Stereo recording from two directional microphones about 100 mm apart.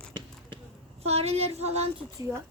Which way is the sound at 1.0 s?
90° right.